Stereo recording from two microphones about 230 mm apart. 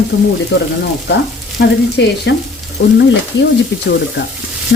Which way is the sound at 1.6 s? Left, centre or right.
Left.